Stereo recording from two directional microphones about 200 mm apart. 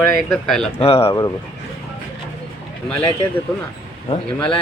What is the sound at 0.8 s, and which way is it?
Speech, 30° left (ahead or behind).